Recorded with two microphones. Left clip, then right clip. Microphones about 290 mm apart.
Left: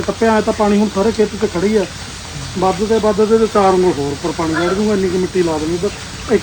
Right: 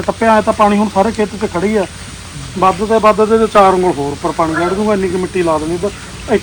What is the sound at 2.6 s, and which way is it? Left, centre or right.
Speech, centre.